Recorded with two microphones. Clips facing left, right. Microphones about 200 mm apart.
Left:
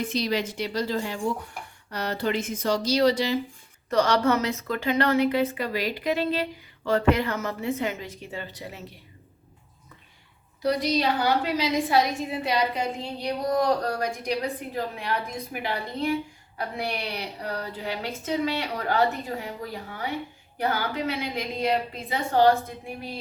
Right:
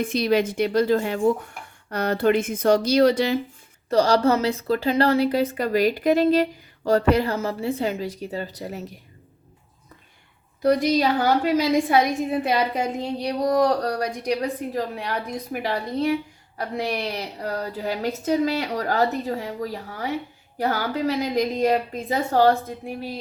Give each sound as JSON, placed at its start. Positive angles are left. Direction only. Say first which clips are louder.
{"t": 0.0, "sound": "a woman's voice", "louder": "right 6 dB", "side_deg": -55}
{"t": 3.8, "sound": "a woman's voice", "louder": "right 4 dB", "side_deg": -30}
{"t": 10.6, "sound": "a woman's voice", "louder": "right 5 dB", "side_deg": -50}
{"t": 13.2, "sound": "a woman's voice", "louder": "right 3 dB", "side_deg": -35}